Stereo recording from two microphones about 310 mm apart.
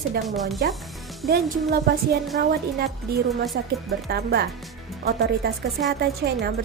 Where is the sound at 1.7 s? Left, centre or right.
Right.